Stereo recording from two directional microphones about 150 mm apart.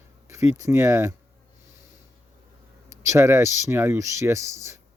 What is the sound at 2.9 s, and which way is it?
Speech, 20° right (ahead or behind).